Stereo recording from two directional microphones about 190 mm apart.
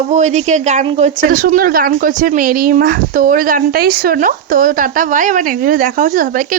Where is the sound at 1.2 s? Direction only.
45° right (ahead or behind).